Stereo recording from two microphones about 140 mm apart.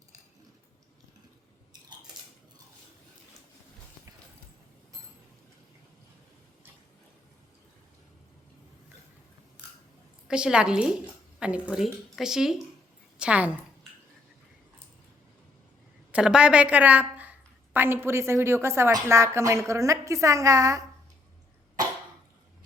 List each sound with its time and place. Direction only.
10.2 s a woman's voice: 5° right (ahead or behind)
16.1 s a woman's voice: 5° right (ahead or behind); by 20.8 s 25° right (ahead or behind)